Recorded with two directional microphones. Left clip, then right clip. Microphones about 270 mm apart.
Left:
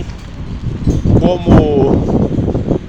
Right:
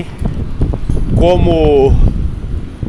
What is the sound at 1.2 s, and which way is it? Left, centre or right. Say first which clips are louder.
Speech: right 2 dB; right.